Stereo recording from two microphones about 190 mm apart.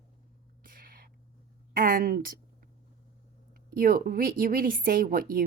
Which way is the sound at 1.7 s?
50° right (ahead or behind).